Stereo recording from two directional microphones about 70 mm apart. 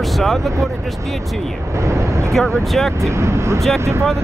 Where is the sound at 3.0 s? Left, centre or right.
Right.